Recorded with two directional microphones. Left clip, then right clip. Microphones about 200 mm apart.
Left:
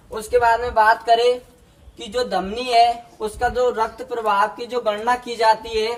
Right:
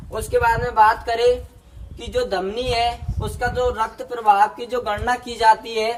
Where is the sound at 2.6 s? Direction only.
20° left (ahead or behind).